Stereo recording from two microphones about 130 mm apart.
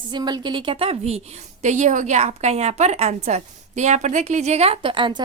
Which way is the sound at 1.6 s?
70° right (ahead or behind).